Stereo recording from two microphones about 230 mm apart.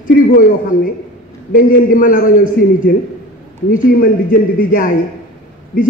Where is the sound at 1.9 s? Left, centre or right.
Left.